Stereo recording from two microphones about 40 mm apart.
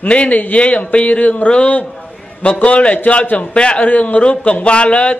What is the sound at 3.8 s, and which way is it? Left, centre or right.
A man's voice, left.